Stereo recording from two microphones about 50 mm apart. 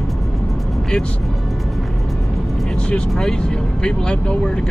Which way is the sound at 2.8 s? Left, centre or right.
Centre.